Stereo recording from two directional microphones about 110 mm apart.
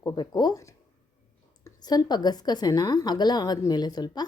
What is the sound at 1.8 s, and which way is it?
A woman's voice, 40° left (ahead or behind).